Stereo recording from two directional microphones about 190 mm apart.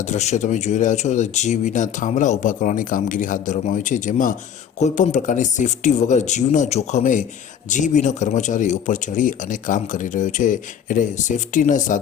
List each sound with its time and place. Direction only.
0.0 s speech: 40° left (ahead or behind)